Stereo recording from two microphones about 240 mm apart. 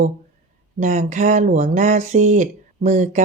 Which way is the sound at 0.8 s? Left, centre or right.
Right.